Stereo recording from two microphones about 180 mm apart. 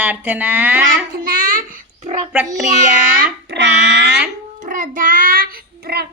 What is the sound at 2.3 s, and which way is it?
Speech, 5° right (ahead or behind).